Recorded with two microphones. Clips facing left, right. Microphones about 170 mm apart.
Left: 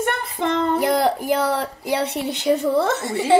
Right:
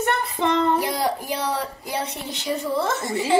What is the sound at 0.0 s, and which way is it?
A woman's voice, 50° left (ahead or behind).